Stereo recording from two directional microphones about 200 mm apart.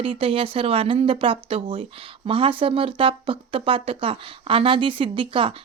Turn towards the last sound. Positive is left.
turn(degrees=-25)  # may be behind; listen again after turning